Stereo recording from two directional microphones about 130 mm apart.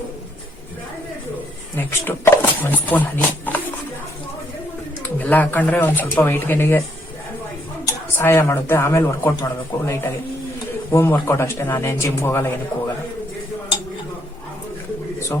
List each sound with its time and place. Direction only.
1.7 s speech: 15° left (ahead or behind)
5.2 s speech: 15° left (ahead or behind)
7.9 s a man's voice: 20° left (ahead or behind)